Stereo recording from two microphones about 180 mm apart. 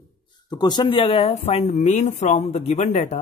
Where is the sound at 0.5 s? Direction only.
25° left (ahead or behind).